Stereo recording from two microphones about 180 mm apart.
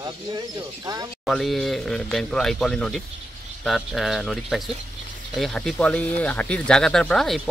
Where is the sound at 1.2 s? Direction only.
Centre (ahead or behind).